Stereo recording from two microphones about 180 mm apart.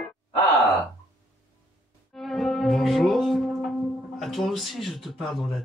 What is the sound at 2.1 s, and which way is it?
Music, centre (ahead or behind).